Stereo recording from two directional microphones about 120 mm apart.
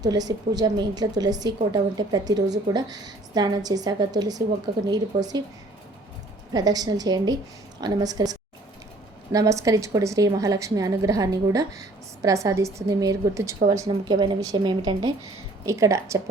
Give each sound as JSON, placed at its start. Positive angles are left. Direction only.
{"t": 0.0, "sound": "a woman's voice", "side_deg": -30}
{"t": 6.5, "sound": "a woman's voice", "side_deg": -30}
{"t": 15.6, "sound": "a woman's voice", "side_deg": -25}